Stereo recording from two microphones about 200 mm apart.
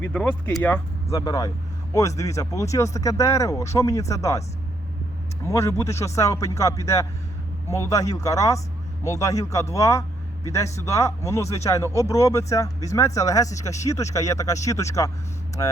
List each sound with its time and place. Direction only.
0.0 s speech: 5° left (ahead or behind)
5.5 s speech: 15° left (ahead or behind)